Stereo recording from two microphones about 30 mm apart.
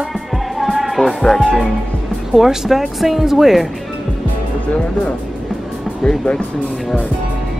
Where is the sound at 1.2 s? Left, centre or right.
Centre.